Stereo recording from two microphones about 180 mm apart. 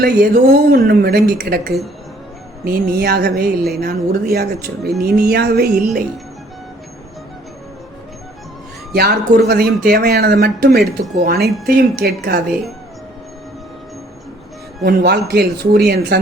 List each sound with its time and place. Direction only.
0.0 s a woman's voice: 60° right (ahead or behind)
8.9 s a woman's voice: 60° right (ahead or behind)
14.8 s a woman's voice: 65° right (ahead or behind)